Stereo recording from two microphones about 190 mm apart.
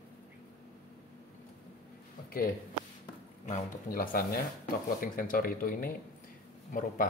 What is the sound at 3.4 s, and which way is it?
Speech, 45° left (ahead or behind).